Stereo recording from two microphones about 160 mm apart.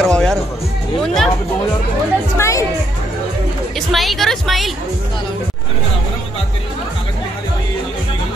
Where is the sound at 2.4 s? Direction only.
20° left (ahead or behind).